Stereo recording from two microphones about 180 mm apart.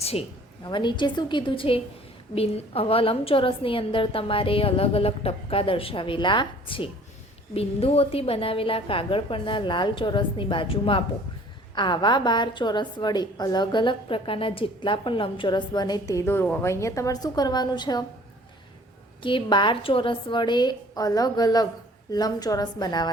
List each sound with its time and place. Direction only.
0.0 s a woman's voice: 35° left (ahead or behind)
19.2 s a woman's voice: 25° left (ahead or behind)